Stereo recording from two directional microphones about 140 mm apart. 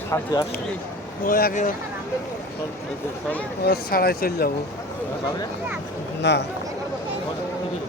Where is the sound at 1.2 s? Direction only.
85° left.